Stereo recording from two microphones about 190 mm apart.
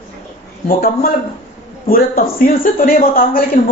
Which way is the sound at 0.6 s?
50° left (ahead or behind).